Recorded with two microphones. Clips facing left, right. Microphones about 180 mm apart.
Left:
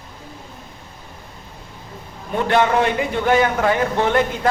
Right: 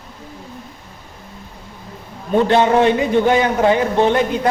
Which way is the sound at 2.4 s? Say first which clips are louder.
Right 2 dB; 25° right (ahead or behind).